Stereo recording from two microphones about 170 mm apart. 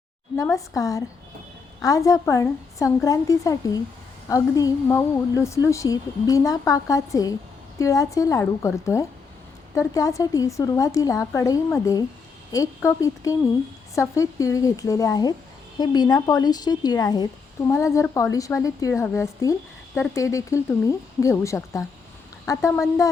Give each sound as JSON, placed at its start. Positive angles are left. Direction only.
{"t": 0.3, "sound": "a woman's voice", "side_deg": 20}